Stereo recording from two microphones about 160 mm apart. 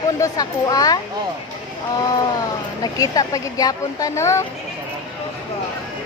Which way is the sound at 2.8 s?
25° left (ahead or behind).